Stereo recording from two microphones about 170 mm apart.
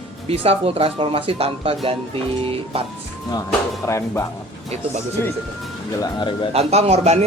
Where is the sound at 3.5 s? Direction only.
15° left (ahead or behind).